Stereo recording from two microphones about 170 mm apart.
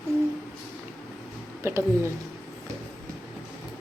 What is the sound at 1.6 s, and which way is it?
Speech, 15° right (ahead or behind).